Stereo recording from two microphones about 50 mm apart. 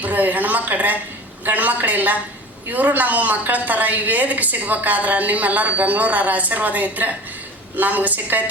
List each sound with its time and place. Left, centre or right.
0.0 s a woman's voice: right